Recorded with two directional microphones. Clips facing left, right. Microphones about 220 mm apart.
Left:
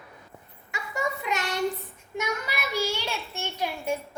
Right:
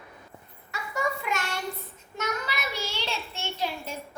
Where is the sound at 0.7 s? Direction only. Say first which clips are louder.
Even; 20° left (ahead or behind).